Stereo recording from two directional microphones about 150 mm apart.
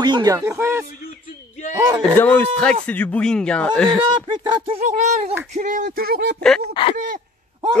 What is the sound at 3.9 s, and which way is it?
Speech, 30° right (ahead or behind).